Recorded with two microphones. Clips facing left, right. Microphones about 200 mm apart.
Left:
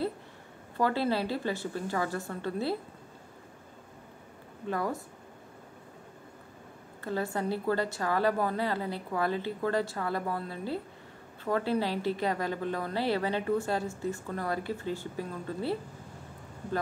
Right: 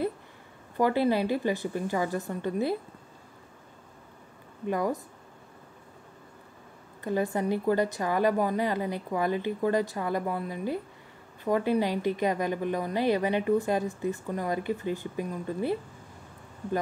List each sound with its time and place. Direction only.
0.7 s a woman's voice: 15° right (ahead or behind)
4.6 s a woman's voice: 15° right (ahead or behind)
7.0 s a woman's voice: 15° right (ahead or behind)